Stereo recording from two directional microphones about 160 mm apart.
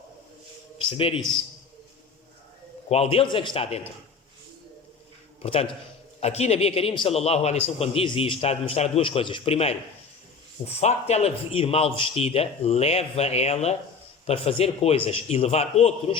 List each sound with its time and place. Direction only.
0.9 s a man's voice: 35° left (ahead or behind)
2.9 s a man's voice: 40° left (ahead or behind)
5.4 s a man's voice: 35° left (ahead or behind)